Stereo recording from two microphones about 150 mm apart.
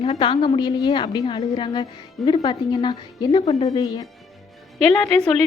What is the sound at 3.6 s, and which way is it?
Speech, 25° left (ahead or behind).